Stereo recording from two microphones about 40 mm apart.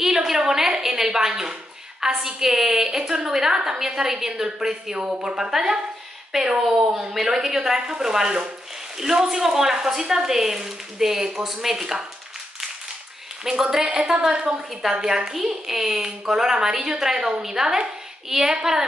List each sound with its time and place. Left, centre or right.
0.0 s a sound: centre
2.0 s speech: centre
13.4 s speech: centre
14.3 s a woman's voice: right